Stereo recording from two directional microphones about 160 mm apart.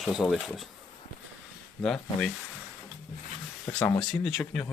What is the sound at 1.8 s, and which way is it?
Speech, 5° left (ahead or behind).